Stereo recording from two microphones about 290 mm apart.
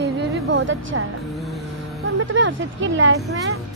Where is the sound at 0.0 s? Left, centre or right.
Right.